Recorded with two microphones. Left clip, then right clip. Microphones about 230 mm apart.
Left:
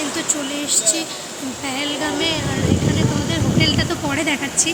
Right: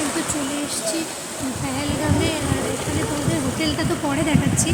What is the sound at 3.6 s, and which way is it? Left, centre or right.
Speech, centre.